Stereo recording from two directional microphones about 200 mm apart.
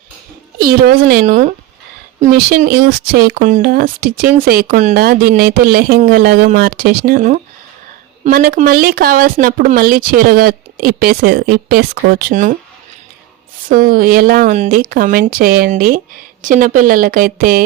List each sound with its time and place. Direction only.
0.6 s speech: 50° right (ahead or behind)
13.7 s speech: 45° right (ahead or behind)